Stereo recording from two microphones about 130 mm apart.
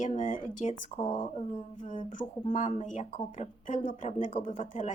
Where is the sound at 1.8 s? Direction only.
80° left.